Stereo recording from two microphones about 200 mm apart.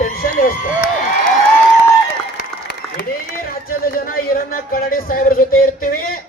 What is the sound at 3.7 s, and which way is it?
Speech, 45° left (ahead or behind).